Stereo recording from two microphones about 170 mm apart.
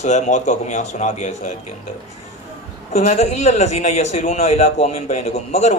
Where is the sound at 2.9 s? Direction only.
40° left (ahead or behind).